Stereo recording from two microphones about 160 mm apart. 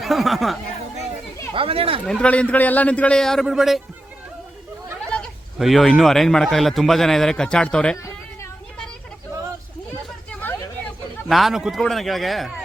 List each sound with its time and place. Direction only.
0.0 s speech: centre (ahead or behind)
1.5 s speech: 35° right (ahead or behind)
2.0 s a man's voice: 5° left (ahead or behind)
5.1 s speech: 5° left (ahead or behind)
10.4 s vehicle: 10° left (ahead or behind)
11.3 s speech: centre (ahead or behind)